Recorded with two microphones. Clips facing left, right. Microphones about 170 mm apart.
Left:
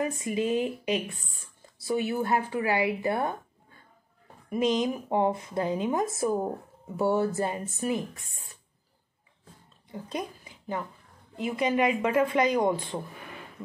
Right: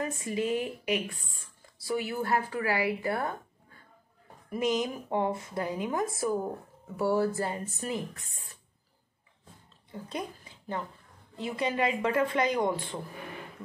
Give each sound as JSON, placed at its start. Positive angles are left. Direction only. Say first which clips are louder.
{"t": 0.0, "sound": "speech", "louder": "left 3 dB", "side_deg": 20}
{"t": 4.5, "sound": "speech", "louder": "left 3 dB", "side_deg": 20}
{"t": 9.8, "sound": "a sound", "louder": "left 2 dB", "side_deg": 20}
{"t": 11.5, "sound": "speech", "louder": "left 4 dB", "side_deg": 20}